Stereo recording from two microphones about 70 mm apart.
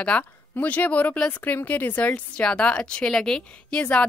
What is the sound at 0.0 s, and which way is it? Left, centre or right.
A woman's voice, centre.